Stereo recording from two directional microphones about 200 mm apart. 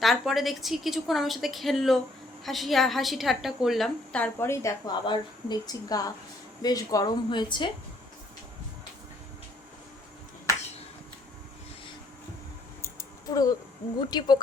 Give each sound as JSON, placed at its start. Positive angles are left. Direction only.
{"t": 0.0, "sound": "a woman's voice", "side_deg": 0}
{"t": 13.0, "sound": "a sound", "side_deg": 20}
{"t": 14.1, "sound": "a woman's voice", "side_deg": 20}